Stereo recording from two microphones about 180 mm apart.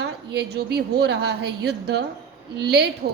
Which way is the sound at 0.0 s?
65° right (ahead or behind).